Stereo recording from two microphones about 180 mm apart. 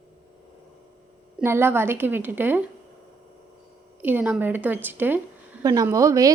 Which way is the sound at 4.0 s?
10° right (ahead or behind).